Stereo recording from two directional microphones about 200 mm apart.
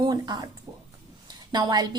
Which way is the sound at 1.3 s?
20° right (ahead or behind).